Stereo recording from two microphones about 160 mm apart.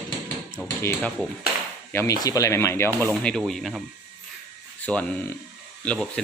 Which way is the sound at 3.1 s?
5° left (ahead or behind).